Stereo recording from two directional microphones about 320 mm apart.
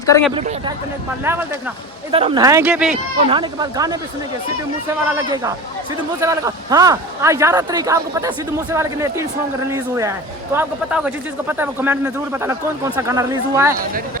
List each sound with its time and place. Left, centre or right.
0.0 s speech: centre
2.1 s a man's voice: centre
3.2 s a man's voice: centre
5.0 s a man's voice: centre